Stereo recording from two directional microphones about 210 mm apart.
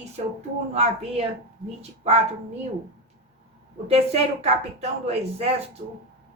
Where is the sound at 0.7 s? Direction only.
30° right (ahead or behind).